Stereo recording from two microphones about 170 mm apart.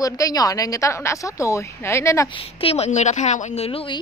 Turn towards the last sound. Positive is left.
turn(degrees=30)  # may be behind; listen again after turning